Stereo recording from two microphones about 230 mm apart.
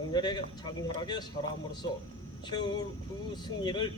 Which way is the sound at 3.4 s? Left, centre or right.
Centre.